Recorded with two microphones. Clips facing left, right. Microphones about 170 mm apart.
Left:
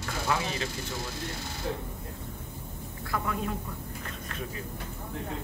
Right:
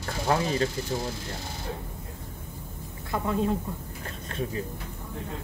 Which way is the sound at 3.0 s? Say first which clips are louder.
Right 5 dB; 25° right (ahead or behind).